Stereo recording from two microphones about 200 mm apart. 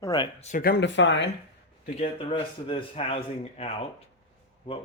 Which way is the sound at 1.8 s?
35° left (ahead or behind).